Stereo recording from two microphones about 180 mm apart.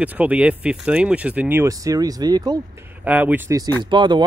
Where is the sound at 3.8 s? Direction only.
25° right (ahead or behind).